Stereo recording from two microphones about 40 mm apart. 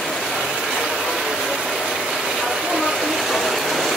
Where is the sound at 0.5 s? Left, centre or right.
Centre.